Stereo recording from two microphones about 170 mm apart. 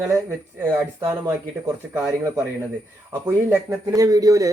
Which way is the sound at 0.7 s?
10° right (ahead or behind).